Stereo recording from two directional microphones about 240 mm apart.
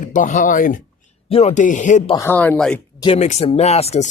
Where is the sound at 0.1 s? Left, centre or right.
Left.